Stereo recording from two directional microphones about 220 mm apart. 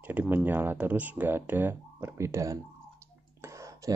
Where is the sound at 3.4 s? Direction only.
15° right (ahead or behind).